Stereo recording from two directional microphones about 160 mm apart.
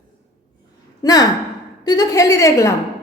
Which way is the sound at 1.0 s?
25° left (ahead or behind).